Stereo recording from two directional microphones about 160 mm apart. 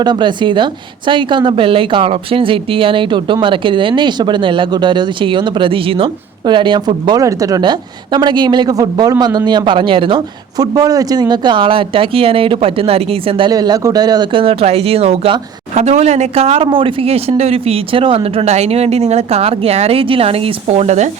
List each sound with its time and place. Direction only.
0.0 s speech: 30° right (ahead or behind); by 21.1 s 45° right (ahead or behind)